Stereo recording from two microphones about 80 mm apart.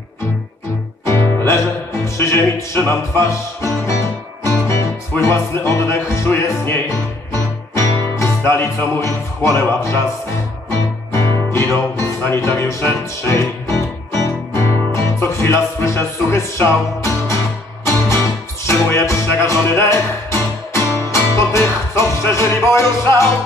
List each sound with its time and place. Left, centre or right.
1.0 s music: left
5.2 s music: left
11.1 s music: left